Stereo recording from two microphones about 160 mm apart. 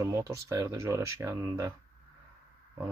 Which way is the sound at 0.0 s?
15° right (ahead or behind).